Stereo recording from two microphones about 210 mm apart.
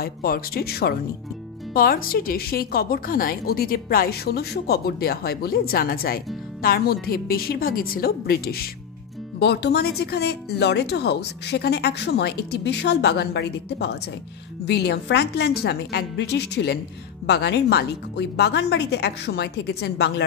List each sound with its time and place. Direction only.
0.0 s a woman's voice: 45° left (ahead or behind)